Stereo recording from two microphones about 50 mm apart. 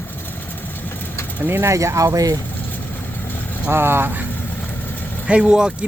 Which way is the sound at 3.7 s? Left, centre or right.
Right.